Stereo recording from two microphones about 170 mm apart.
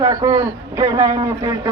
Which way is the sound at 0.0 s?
20° right (ahead or behind).